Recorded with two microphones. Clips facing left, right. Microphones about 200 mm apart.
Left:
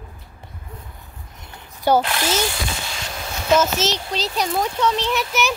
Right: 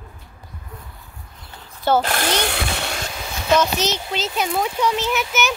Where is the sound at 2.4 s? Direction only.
65° right (ahead or behind).